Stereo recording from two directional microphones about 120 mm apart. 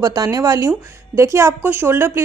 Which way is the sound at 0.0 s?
30° right (ahead or behind).